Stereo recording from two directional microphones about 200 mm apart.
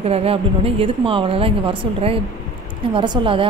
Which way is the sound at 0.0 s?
30° right (ahead or behind).